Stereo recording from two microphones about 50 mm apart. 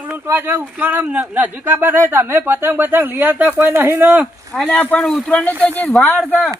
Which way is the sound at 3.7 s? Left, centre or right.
Right.